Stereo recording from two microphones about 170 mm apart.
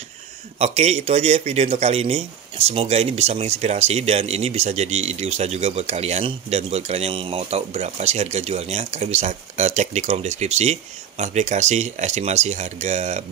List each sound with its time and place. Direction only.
0.6 s speech: 40° right (ahead or behind)